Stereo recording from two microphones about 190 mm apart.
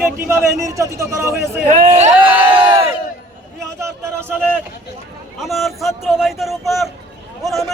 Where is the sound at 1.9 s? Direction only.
35° right (ahead or behind).